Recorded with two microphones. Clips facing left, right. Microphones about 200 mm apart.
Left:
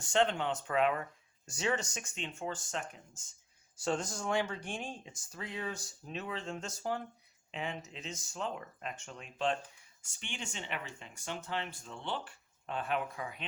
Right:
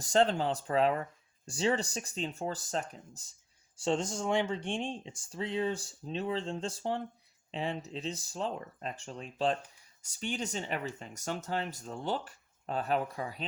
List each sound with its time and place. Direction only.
0.0 s speech: 35° right (ahead or behind)